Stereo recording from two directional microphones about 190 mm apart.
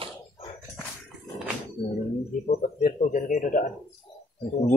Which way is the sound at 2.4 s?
40° left (ahead or behind).